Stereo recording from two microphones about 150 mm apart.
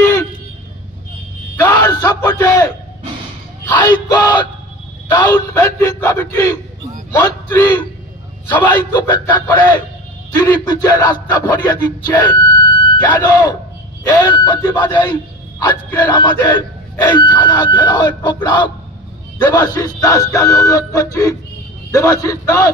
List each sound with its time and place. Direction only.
0.0 s vehicle: 20° left (ahead or behind)
1.9 s a sound: 25° left (ahead or behind)
3.6 s a sound: 30° left (ahead or behind)
5.1 s speech: 20° left (ahead or behind)
8.9 s speech: 30° left (ahead or behind)
10.4 s a sound: 25° left (ahead or behind)
13.2 s speech: 30° left (ahead or behind)
14.7 s speech: 15° left (ahead or behind)
15.6 s speech: 25° left (ahead or behind)